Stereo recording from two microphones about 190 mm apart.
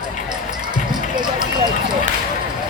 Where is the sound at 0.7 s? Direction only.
25° right (ahead or behind).